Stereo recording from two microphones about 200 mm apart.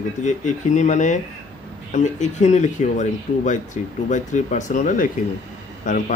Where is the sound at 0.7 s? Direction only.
35° left (ahead or behind).